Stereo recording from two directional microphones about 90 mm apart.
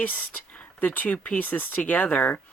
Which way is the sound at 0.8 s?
20° left (ahead or behind).